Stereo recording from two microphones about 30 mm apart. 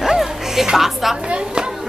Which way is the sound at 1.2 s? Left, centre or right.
Right.